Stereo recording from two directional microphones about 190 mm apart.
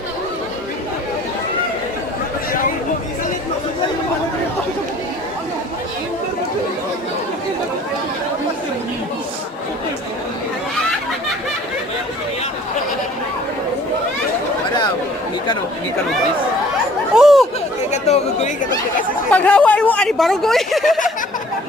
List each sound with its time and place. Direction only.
2.5 s a sound: 45° left (ahead or behind)
17.2 s chatter: centre (ahead or behind)
17.9 s chatter: 35° left (ahead or behind)
19.3 s speech: 10° left (ahead or behind)